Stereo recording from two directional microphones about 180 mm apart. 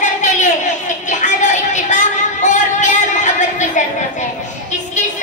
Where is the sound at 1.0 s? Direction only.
45° left (ahead or behind).